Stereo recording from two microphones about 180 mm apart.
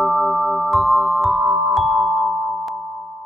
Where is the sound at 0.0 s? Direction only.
Centre (ahead or behind).